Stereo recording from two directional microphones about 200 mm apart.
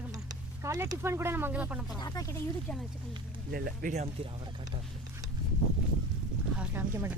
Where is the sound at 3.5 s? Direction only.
50° right (ahead or behind).